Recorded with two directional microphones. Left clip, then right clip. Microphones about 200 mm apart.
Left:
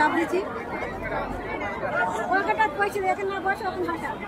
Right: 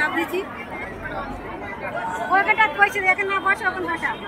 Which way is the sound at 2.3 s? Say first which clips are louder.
Right 8 dB; 25° left (ahead or behind).